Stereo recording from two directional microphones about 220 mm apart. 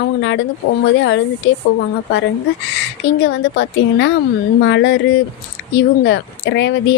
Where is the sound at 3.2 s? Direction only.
55° left (ahead or behind).